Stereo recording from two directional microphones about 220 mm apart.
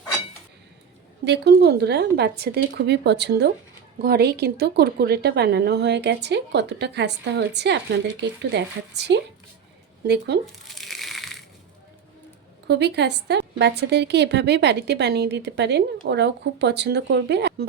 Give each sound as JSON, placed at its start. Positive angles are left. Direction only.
{"t": 1.2, "sound": "a woman's voice", "side_deg": -50}
{"t": 10.7, "sound": "crushing", "side_deg": 0}
{"t": 12.6, "sound": "a woman's voice", "side_deg": -50}